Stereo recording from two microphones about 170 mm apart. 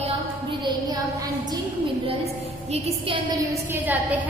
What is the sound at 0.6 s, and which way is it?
Speech, 25° right (ahead or behind).